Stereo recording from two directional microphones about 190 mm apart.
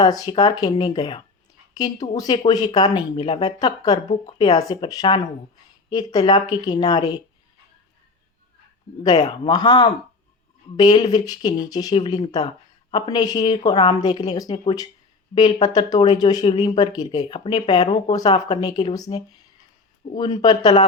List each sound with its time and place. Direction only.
0.0 s speech: 20° left (ahead or behind)
9.0 s speech: 20° left (ahead or behind)